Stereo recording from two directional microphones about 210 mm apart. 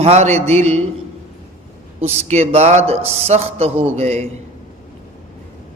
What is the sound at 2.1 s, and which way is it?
A man's voice, 30° right (ahead or behind).